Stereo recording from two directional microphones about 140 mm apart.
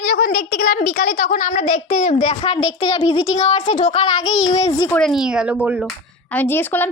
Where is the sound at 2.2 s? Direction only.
45° left (ahead or behind).